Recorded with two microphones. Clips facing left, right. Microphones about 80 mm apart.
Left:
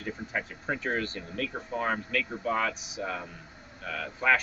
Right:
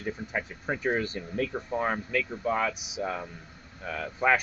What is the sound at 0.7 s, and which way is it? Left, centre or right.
Speech, centre.